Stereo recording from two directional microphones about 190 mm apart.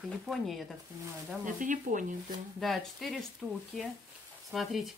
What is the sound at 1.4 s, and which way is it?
Speech, 45° right (ahead or behind).